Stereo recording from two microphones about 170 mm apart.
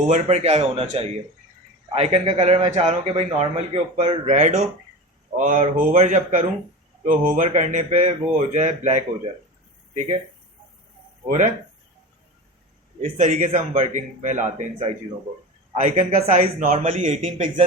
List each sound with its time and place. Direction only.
0.1 s a man's voice: 40° right (ahead or behind)
13.0 s speech: 40° right (ahead or behind)